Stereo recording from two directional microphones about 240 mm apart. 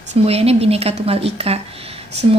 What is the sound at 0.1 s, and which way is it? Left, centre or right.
A woman's voice, right.